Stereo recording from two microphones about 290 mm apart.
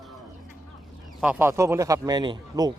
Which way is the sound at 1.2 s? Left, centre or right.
Centre.